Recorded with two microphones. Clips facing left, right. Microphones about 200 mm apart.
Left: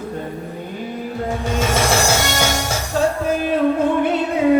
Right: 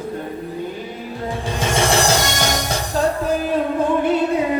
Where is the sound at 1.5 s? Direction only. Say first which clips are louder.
Even; 30° right (ahead or behind).